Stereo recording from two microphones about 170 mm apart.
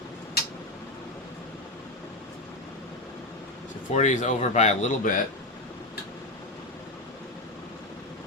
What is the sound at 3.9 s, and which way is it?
Speech, 45° left (ahead or behind).